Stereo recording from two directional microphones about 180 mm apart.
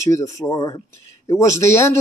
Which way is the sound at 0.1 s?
15° left (ahead or behind).